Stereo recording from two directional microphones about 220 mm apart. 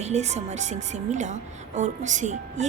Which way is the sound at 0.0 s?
30° right (ahead or behind).